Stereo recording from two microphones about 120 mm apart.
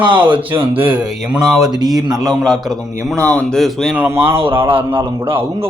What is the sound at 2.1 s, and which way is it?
Speech, 30° right (ahead or behind).